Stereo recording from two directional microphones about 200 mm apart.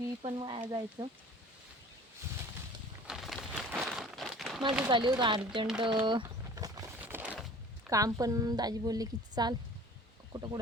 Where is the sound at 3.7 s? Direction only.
Centre (ahead or behind).